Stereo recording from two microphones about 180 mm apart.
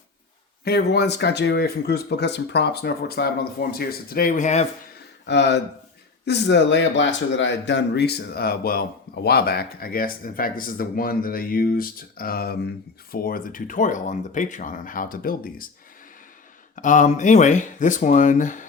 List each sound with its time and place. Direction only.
0.6 s speech: 65° left (ahead or behind); by 4.6 s 40° left (ahead or behind)
5.2 s speech: 70° left (ahead or behind); by 15.7 s 50° left (ahead or behind)
16.7 s speech: 45° left (ahead or behind)